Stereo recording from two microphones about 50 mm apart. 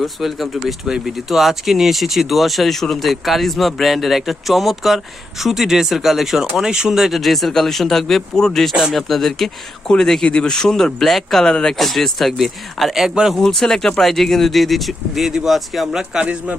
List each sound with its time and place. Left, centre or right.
0.0 s speech: centre
6.6 s speech: centre
7.1 s speech: centre
13.4 s speech: centre
16.2 s a man's voice: right